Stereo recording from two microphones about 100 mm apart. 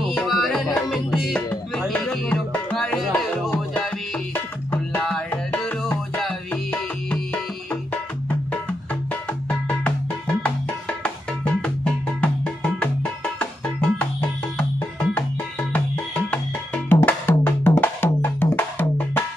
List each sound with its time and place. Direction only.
0.1 s music: 5° left (ahead or behind)
4.3 s music: 20° left (ahead or behind)
8.5 s music: 15° left (ahead or behind)
14.6 s music: 10° left (ahead or behind)
16.3 s music: 15° left (ahead or behind)